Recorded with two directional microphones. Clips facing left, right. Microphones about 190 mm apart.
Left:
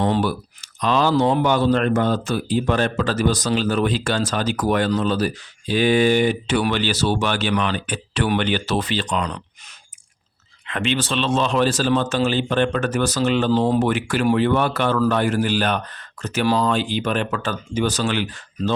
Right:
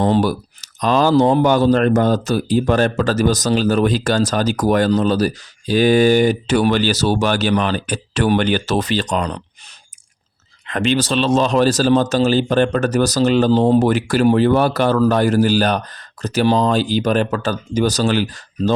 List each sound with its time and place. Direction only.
0.0 s speech: 35° right (ahead or behind)